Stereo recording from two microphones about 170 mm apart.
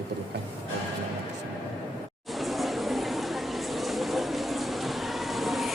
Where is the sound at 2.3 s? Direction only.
Centre (ahead or behind).